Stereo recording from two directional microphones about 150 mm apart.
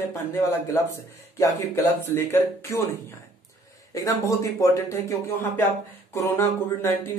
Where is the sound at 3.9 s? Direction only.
20° left (ahead or behind).